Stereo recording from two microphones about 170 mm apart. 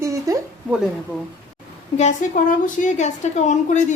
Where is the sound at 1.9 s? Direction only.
45° left (ahead or behind).